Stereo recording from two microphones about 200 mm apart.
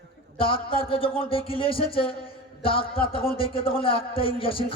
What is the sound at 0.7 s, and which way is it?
A man's voice, 25° left (ahead or behind).